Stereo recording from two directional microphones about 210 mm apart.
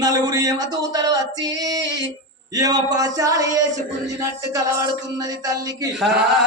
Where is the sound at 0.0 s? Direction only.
20° right (ahead or behind).